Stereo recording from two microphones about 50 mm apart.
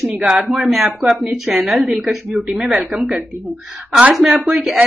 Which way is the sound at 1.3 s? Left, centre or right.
Right.